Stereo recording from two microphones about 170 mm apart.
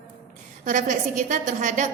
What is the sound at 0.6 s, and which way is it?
A woman's voice, 50° right (ahead or behind).